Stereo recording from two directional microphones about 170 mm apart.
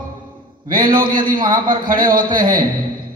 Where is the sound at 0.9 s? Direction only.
55° right (ahead or behind).